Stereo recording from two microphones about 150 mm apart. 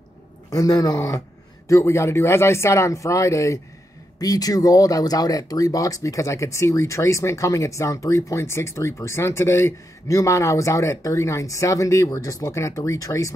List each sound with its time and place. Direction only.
0.5 s speech: 20° left (ahead or behind)